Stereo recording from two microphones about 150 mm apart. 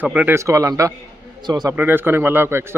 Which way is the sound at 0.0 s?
10° right (ahead or behind).